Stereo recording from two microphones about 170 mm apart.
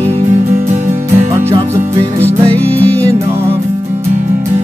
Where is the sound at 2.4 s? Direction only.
10° left (ahead or behind).